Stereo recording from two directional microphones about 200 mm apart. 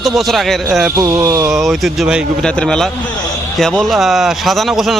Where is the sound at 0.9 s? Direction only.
20° right (ahead or behind).